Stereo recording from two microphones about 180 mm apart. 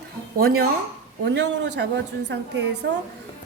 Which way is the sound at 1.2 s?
75° right (ahead or behind).